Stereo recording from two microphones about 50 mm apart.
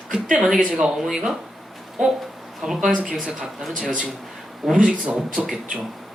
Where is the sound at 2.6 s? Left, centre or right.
Centre.